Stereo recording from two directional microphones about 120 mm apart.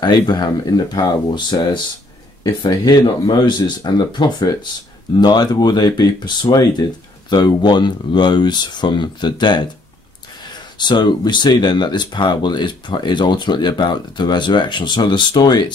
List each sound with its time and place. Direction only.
0.0 s speech: 35° left (ahead or behind)